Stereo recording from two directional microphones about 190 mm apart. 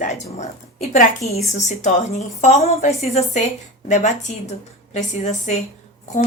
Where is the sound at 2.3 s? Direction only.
35° left (ahead or behind).